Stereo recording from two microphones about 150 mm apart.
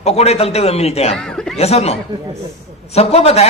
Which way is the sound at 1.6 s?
45° left (ahead or behind).